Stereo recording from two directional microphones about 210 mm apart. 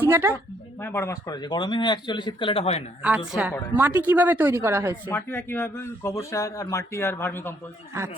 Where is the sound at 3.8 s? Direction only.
10° right (ahead or behind).